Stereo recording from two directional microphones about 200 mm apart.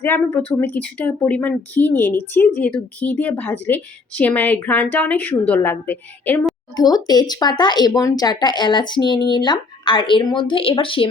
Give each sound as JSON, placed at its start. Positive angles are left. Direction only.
{"t": 0.0, "sound": "speech", "side_deg": 10}
{"t": 6.7, "sound": "speech", "side_deg": 20}